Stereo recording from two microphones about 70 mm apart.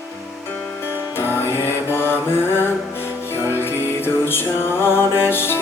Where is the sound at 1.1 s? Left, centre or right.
Left.